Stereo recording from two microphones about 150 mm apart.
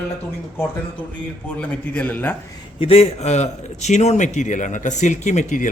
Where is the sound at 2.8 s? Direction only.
40° left (ahead or behind).